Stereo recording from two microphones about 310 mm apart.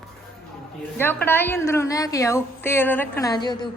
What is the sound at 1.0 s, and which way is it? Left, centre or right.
A woman's voice, centre.